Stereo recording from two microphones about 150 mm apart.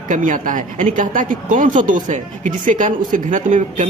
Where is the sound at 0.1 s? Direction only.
60° right (ahead or behind).